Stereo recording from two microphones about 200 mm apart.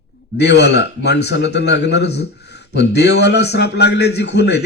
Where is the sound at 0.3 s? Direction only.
60° left (ahead or behind).